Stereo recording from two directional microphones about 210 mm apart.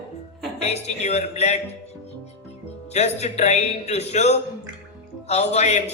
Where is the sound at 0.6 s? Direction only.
30° left (ahead or behind).